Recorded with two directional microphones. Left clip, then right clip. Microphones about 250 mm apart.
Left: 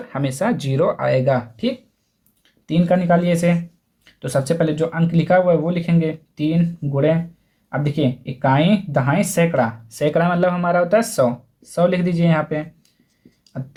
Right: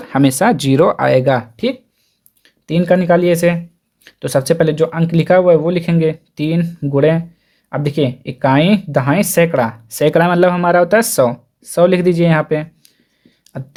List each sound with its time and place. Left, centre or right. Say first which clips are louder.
0.0 s speech: right 9 dB; right